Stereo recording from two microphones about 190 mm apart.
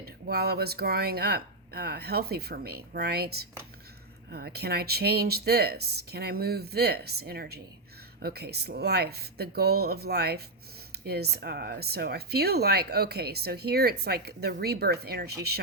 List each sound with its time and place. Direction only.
0.0 s speech: 55° right (ahead or behind)